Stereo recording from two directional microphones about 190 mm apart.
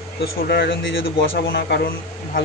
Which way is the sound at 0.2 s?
60° left (ahead or behind).